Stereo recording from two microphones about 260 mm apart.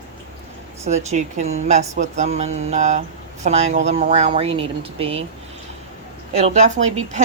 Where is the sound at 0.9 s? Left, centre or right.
Right.